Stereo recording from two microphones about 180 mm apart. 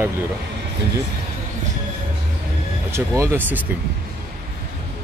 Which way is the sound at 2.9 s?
15° right (ahead or behind).